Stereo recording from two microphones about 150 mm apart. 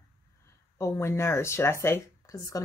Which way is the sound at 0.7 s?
20° left (ahead or behind).